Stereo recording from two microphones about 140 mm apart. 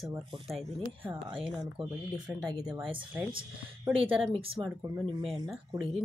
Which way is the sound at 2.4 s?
30° right (ahead or behind).